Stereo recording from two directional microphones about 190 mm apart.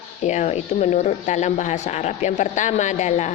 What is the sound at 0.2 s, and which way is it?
Speech, 35° left (ahead or behind).